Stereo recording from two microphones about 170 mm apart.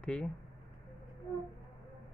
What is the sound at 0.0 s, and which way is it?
Speech, 5° left (ahead or behind).